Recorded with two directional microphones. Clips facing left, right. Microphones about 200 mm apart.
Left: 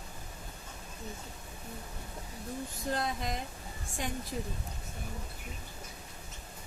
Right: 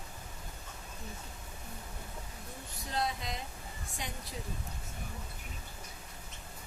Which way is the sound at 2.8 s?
50° left (ahead or behind).